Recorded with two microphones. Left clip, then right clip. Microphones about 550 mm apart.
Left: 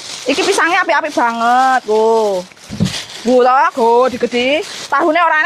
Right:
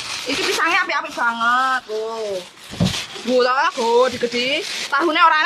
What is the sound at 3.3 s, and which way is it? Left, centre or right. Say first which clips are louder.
Speech: left 6 dB; left.